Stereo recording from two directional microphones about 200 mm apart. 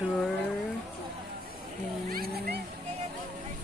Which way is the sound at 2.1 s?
50° right (ahead or behind).